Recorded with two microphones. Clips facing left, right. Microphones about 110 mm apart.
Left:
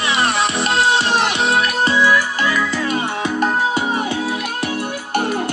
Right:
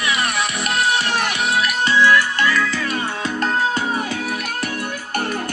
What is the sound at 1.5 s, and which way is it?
Music, 35° left (ahead or behind).